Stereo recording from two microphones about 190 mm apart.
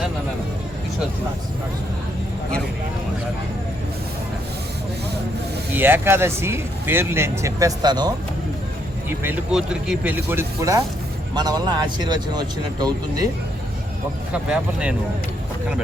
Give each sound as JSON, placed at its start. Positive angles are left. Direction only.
{"t": 5.7, "sound": "speech", "side_deg": -10}
{"t": 9.0, "sound": "speech", "side_deg": -10}
{"t": 14.3, "sound": "speech", "side_deg": -5}